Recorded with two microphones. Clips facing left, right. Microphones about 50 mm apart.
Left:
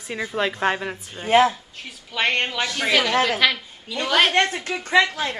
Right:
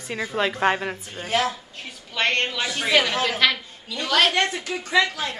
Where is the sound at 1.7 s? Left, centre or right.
Centre.